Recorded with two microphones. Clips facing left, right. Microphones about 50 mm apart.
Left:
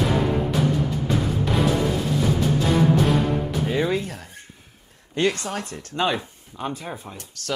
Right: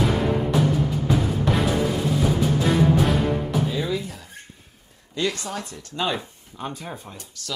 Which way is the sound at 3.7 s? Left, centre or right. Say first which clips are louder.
Left 3 dB; left.